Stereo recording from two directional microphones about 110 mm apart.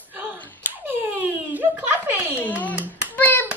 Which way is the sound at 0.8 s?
15° right (ahead or behind).